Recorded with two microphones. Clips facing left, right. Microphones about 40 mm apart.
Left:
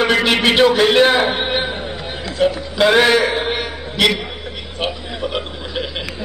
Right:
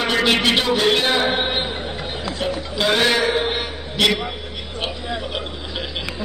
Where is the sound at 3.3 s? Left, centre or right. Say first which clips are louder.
Left 1 dB; centre.